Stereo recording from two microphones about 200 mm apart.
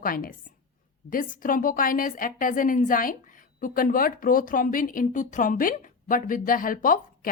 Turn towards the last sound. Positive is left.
turn(degrees=45)  # may be behind; listen again after turning